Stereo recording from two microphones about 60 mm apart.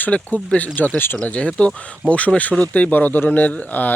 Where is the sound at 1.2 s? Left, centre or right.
Left.